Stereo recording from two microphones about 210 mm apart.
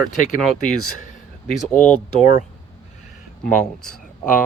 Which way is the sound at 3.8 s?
5° left (ahead or behind).